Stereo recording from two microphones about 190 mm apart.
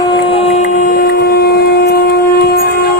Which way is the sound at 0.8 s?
50° left (ahead or behind).